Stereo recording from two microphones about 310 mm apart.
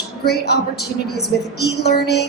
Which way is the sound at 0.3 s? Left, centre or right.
Left.